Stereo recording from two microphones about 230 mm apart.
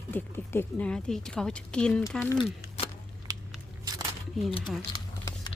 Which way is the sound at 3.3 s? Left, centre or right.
Centre.